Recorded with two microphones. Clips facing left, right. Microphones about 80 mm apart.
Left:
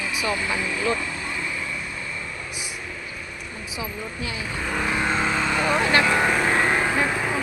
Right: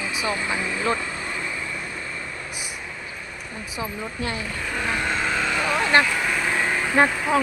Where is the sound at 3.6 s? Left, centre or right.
Right.